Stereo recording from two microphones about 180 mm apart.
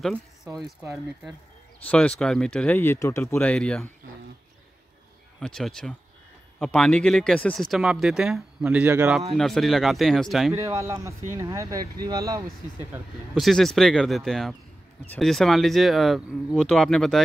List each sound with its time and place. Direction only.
1.9 s speech: 5° left (ahead or behind)
5.4 s speech: 5° left (ahead or behind)
9.3 s speech: centre (ahead or behind)
10.5 s speech: 15° right (ahead or behind)
13.3 s speech: centre (ahead or behind)